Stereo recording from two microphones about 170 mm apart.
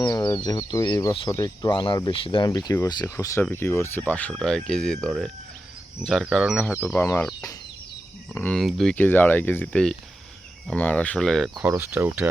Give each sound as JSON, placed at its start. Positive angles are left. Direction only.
{"t": 0.0, "sound": "speech", "side_deg": 25}
{"t": 6.7, "sound": "speech", "side_deg": 10}
{"t": 8.3, "sound": "speech", "side_deg": 15}
{"t": 8.5, "sound": "speech", "side_deg": 0}
{"t": 11.5, "sound": "speech", "side_deg": -15}